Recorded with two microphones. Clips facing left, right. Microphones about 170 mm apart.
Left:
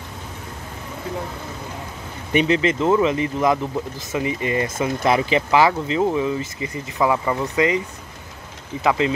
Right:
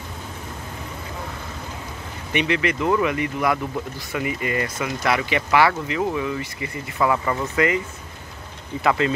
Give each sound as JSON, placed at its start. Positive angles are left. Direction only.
{"t": 2.3, "sound": "speech", "side_deg": 30}
{"t": 8.8, "sound": "speech", "side_deg": 15}